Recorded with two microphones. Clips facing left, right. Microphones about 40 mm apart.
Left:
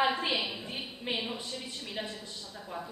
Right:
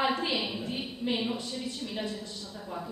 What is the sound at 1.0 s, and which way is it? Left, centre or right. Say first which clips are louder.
Speech: right 3 dB; left.